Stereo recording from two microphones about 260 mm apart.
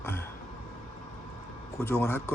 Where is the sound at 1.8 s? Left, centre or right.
Centre.